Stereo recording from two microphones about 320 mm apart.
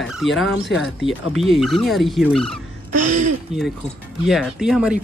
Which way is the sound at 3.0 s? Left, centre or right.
Right.